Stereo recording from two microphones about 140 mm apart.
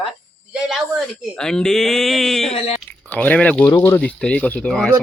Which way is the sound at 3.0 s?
10° left (ahead or behind).